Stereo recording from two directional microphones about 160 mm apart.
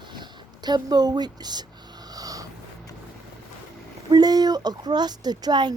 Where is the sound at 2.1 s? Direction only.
20° right (ahead or behind).